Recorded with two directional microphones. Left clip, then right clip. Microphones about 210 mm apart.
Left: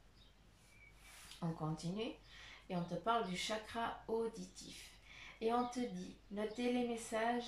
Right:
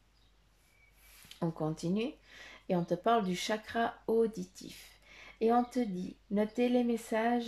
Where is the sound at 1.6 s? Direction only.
45° right (ahead or behind).